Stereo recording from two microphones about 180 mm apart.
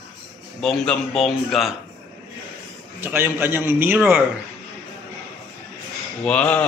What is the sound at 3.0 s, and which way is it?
A man's voice, 10° right (ahead or behind).